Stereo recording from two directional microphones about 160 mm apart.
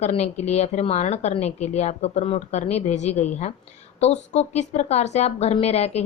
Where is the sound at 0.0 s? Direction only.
45° left (ahead or behind).